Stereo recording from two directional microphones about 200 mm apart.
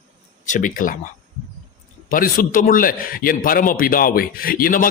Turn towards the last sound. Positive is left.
turn(degrees=45)  # may be behind; listen again after turning